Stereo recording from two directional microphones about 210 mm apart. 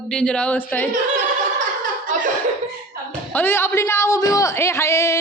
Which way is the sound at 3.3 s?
10° left (ahead or behind).